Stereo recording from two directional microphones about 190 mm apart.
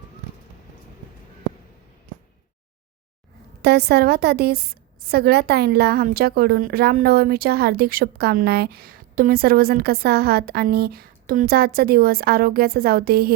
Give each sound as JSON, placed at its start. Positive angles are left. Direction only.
{"t": 3.6, "sound": "a woman's voice", "side_deg": -60}